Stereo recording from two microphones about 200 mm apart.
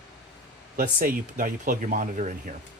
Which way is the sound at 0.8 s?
45° right (ahead or behind).